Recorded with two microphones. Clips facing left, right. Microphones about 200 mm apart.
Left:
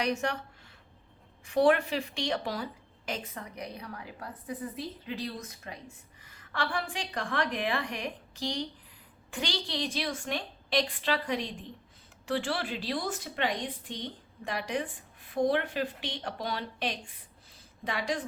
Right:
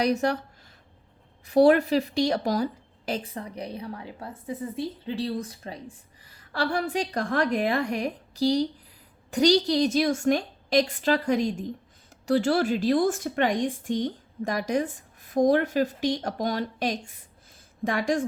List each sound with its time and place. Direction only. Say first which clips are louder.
0.0 s a woman's voice: right 7 dB; 35° right (ahead or behind)
1.5 s a woman's voice: right 6 dB; 40° right (ahead or behind)